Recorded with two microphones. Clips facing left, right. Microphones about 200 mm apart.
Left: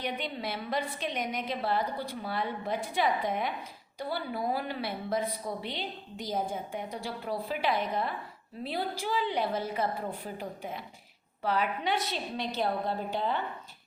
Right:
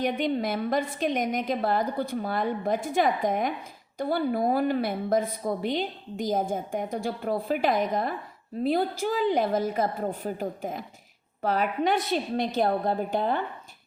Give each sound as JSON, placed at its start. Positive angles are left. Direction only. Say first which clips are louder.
{"t": 0.0, "sound": "a woman's voice", "louder": "right 9 dB", "side_deg": -45}